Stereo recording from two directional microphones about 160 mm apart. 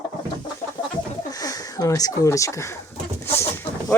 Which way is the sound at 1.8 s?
20° left (ahead or behind).